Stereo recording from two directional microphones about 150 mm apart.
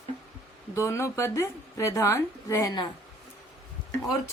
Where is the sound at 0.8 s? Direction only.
20° left (ahead or behind).